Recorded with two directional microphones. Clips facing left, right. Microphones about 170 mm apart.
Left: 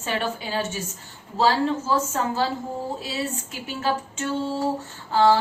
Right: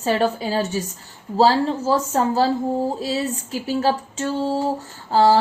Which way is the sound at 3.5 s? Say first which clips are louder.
Right 9 dB; 35° right (ahead or behind).